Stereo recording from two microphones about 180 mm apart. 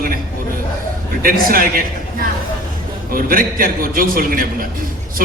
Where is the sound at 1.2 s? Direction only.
50° right (ahead or behind).